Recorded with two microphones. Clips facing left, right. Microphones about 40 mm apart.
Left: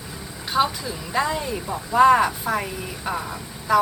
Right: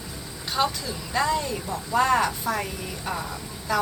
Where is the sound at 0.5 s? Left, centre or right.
Centre.